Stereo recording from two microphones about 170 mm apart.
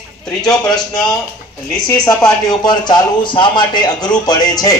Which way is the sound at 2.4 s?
25° left (ahead or behind).